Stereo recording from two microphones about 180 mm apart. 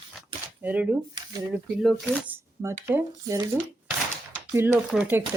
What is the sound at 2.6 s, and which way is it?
Speech, 15° right (ahead or behind).